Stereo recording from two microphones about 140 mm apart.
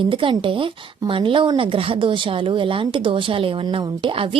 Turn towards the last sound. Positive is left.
turn(degrees=-40)  # may be behind; listen again after turning